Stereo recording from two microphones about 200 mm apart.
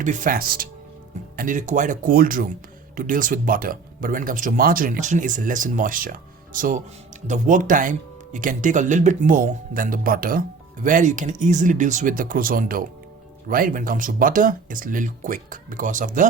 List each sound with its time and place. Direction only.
0.0 s speech: 40° right (ahead or behind)